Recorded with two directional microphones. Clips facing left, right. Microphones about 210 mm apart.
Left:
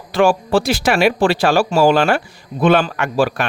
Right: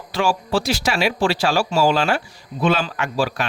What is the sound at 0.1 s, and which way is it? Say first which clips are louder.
Speech: left 6 dB; 55° left (ahead or behind).